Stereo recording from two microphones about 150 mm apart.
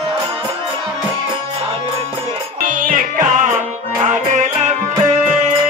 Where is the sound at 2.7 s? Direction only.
65° right (ahead or behind).